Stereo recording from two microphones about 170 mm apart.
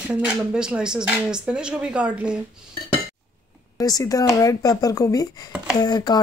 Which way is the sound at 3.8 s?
20° left (ahead or behind).